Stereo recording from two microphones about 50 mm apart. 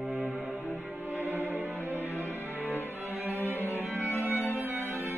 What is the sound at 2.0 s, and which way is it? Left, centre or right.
Music, left.